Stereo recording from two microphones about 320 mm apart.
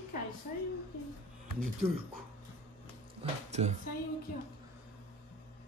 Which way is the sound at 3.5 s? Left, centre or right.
Right.